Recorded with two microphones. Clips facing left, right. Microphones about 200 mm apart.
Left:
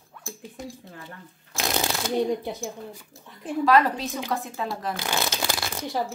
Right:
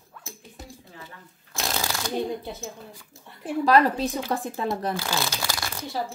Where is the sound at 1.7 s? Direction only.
20° left (ahead or behind).